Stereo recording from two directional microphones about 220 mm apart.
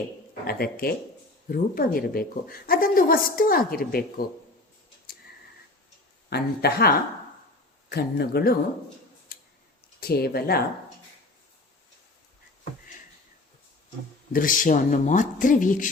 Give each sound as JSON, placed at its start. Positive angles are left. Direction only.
{"t": 0.4, "sound": "a woman's voice", "side_deg": 45}
{"t": 6.3, "sound": "speech", "side_deg": 45}
{"t": 9.3, "sound": "tick-tock", "side_deg": 40}
{"t": 10.0, "sound": "speech", "side_deg": 45}
{"t": 14.3, "sound": "a woman's voice", "side_deg": 40}